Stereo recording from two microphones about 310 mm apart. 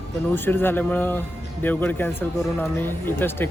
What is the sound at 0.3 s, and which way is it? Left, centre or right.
Speech, centre.